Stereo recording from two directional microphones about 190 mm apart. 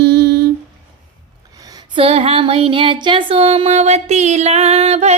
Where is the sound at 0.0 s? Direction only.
60° right (ahead or behind).